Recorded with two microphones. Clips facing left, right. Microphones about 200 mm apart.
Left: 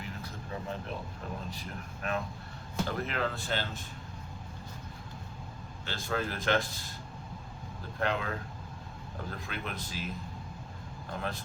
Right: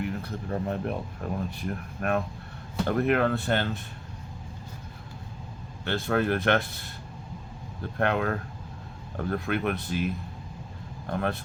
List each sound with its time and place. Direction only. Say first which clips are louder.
0.0 s a sound: right 10 dB; 60° right (ahead or behind)
1.5 s speech: right 8 dB; 60° right (ahead or behind)
5.8 s speech: right 8 dB; 60° right (ahead or behind)
7.9 s a man's voice: right 6 dB; 60° right (ahead or behind)